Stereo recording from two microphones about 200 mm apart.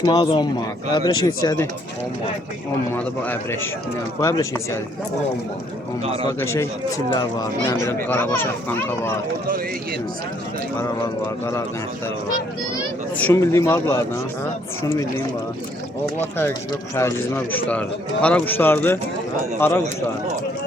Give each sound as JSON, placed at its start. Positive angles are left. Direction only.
{"t": 0.0, "sound": "speech", "side_deg": 20}
{"t": 2.9, "sound": "speech", "side_deg": 10}
{"t": 6.2, "sound": "speech", "side_deg": 15}
{"t": 13.1, "sound": "speech", "side_deg": 10}
{"t": 16.1, "sound": "speech", "side_deg": 10}